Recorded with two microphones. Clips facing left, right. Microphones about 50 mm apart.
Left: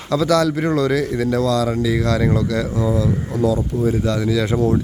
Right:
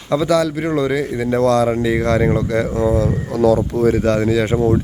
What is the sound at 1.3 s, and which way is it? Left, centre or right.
Speech, right.